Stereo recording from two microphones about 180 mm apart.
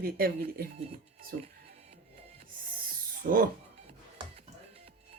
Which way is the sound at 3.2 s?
55° right (ahead or behind).